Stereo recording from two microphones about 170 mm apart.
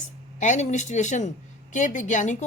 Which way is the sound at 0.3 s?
45° left (ahead or behind).